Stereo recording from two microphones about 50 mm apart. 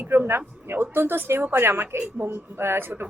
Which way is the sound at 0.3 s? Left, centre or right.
Right.